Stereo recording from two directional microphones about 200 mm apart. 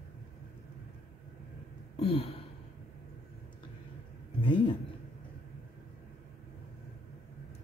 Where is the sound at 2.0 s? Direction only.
30° left (ahead or behind).